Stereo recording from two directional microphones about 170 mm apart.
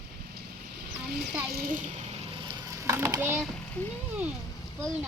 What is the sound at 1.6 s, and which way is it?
Speech, 55° right (ahead or behind).